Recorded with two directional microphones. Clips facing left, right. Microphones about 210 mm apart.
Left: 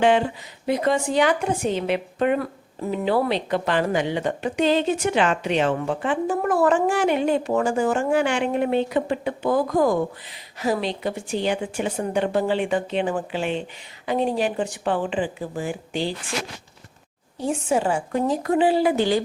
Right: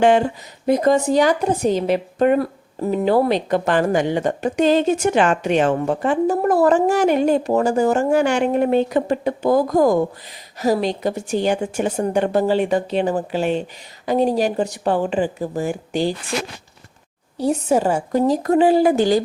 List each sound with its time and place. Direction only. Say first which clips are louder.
0.0 s a woman's voice: right 4 dB; 45° right (ahead or behind)
17.3 s a woman's voice: right 5 dB; 40° right (ahead or behind)